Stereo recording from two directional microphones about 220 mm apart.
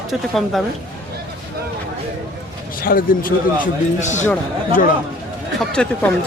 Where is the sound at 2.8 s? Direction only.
40° left (ahead or behind).